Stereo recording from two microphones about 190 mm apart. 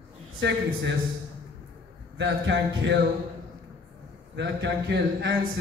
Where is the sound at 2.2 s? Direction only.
70° right (ahead or behind).